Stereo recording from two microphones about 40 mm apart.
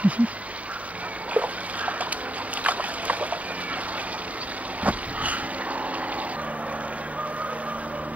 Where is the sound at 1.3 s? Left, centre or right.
Right.